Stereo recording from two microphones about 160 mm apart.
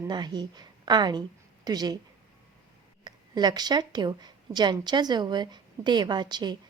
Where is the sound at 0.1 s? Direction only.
25° right (ahead or behind).